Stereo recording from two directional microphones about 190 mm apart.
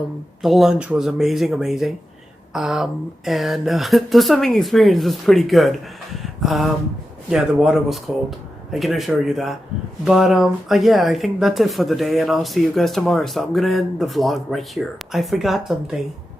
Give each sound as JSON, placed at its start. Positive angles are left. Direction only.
{"t": 0.4, "sound": "speech", "side_deg": 0}